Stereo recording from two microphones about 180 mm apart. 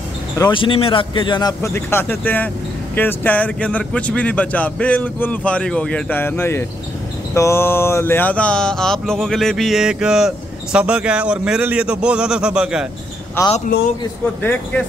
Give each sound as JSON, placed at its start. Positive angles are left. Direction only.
{"t": 0.4, "sound": "speech", "side_deg": 30}
{"t": 7.3, "sound": "a sound", "side_deg": 15}
{"t": 13.4, "sound": "speech", "side_deg": 15}